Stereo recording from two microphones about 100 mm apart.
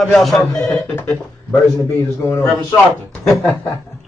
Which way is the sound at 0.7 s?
20° left (ahead or behind).